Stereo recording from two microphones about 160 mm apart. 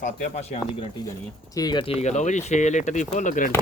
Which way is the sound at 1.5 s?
25° left (ahead or behind).